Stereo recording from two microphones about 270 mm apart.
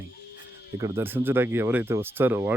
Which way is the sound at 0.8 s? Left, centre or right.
Centre.